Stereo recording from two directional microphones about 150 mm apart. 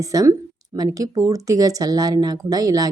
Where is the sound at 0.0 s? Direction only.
25° right (ahead or behind).